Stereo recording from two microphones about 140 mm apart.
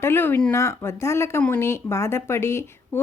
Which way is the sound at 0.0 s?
15° left (ahead or behind).